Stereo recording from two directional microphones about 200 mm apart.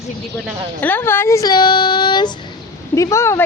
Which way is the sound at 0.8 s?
10° left (ahead or behind).